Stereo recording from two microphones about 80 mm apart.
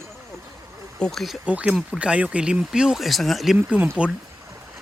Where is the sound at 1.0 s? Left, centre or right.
Centre.